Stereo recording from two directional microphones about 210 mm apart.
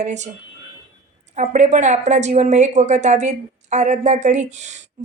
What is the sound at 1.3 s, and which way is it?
A woman's voice, 35° right (ahead or behind).